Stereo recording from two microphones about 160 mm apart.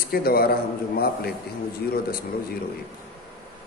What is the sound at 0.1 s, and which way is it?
A man's voice, 70° left (ahead or behind).